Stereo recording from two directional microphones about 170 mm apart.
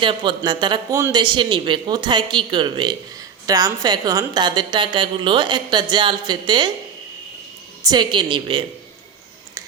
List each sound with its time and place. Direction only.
0.0 s a woman's voice: 30° right (ahead or behind)
7.9 s a woman's voice: 25° right (ahead or behind)